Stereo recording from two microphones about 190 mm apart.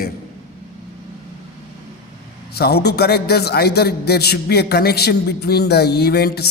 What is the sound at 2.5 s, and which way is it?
A man's voice, 55° left (ahead or behind).